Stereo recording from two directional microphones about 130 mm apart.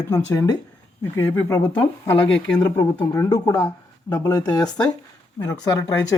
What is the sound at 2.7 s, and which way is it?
Speech, 20° left (ahead or behind).